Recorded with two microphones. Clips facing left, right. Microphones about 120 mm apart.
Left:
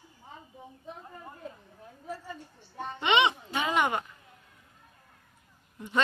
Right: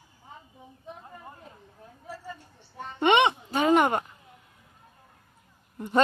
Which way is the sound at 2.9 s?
50° right (ahead or behind).